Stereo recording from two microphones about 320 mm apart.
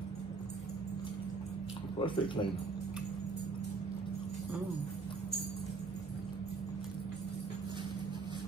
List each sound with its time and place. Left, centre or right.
2.0 s speech: centre